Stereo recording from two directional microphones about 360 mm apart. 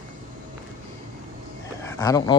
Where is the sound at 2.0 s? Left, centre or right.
Centre.